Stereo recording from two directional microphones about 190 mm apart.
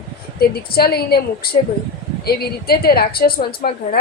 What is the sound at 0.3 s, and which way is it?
A woman's voice, 55° left (ahead or behind).